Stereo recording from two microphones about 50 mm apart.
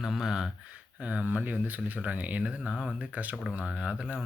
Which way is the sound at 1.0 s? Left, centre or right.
Right.